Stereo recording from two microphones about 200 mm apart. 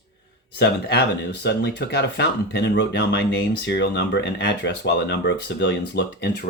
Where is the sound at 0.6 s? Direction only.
55° left (ahead or behind).